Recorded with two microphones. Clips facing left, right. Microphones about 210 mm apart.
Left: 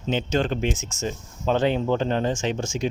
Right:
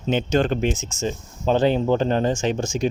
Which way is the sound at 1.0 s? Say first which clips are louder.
Right 4 dB; 30° right (ahead or behind).